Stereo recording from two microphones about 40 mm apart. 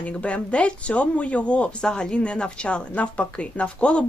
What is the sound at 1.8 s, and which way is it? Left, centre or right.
Speech, left.